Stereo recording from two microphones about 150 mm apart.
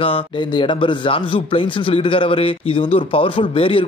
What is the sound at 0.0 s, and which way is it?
Speech, 35° left (ahead or behind).